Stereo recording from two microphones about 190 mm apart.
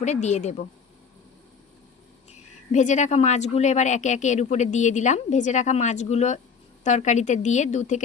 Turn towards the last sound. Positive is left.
turn(degrees=40)  # may be behind; listen again after turning